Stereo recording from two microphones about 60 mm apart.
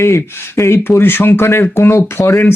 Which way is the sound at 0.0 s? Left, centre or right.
Left.